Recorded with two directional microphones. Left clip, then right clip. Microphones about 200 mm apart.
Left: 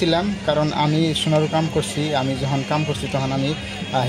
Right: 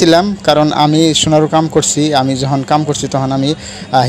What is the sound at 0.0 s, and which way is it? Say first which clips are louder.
Speech: right 10 dB; 45° right (ahead or behind).